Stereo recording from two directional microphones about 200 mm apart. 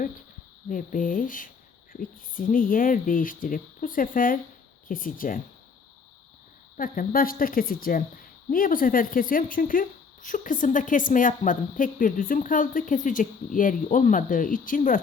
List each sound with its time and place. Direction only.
0.7 s speech: 40° left (ahead or behind)
6.7 s speech: 45° left (ahead or behind)